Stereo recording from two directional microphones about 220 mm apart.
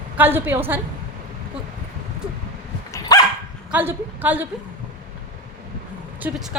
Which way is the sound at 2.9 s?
15° left (ahead or behind).